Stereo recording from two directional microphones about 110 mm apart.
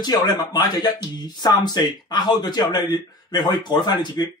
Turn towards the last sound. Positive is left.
turn(degrees=40)  # may be behind; listen again after turning